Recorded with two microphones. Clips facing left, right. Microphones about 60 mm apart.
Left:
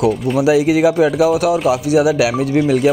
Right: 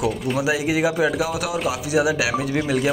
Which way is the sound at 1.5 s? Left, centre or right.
Centre.